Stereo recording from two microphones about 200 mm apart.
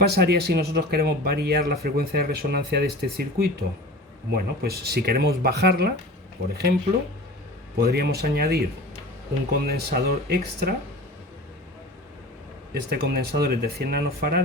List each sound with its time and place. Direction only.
0.0 s speech: 55° right (ahead or behind)
7.8 s speech: 50° right (ahead or behind)
12.9 s speech: 50° right (ahead or behind)